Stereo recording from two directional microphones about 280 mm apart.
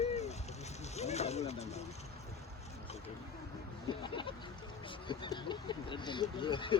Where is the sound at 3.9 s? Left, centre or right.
Centre.